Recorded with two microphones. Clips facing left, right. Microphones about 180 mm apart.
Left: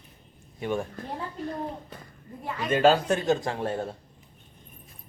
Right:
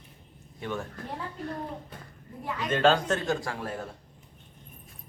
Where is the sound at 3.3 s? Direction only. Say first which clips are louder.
Left 5 dB; 20° left (ahead or behind).